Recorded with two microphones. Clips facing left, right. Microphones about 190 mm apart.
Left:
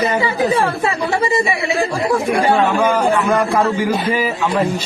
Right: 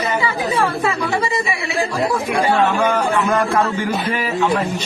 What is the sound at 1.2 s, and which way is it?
Speech, 30° left (ahead or behind).